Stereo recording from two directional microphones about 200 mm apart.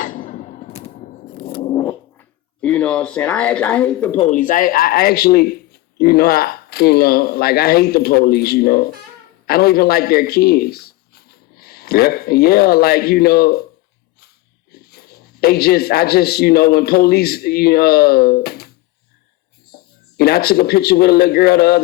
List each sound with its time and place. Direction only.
0.0 s a sound: 40° left (ahead or behind)
1.6 s dog: 20° left (ahead or behind)
2.1 s speech: 5° left (ahead or behind)
4.2 s speech: 40° left (ahead or behind)
14.7 s speech: 50° left (ahead or behind)
19.7 s speech: 50° left (ahead or behind)